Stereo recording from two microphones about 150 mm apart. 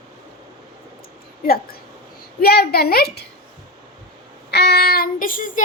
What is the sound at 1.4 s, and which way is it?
A woman's voice, 85° left.